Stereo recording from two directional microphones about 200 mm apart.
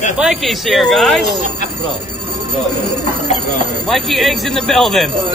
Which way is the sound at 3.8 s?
Centre (ahead or behind).